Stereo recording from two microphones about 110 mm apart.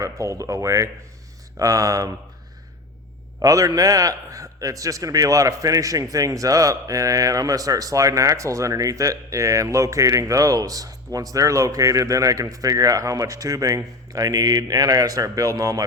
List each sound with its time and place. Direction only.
0.0 s a man's voice: 30° right (ahead or behind)
3.4 s a man's voice: 30° right (ahead or behind)